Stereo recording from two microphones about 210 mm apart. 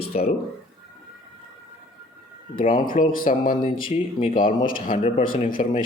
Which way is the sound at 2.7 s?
40° left (ahead or behind).